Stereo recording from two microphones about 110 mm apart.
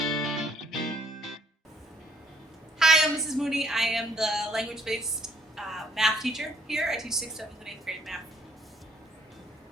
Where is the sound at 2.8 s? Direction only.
5° right (ahead or behind).